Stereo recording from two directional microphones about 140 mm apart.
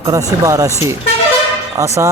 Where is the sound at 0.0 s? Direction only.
20° right (ahead or behind).